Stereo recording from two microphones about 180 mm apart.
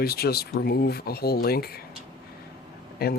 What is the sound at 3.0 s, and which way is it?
Speech, 60° left (ahead or behind).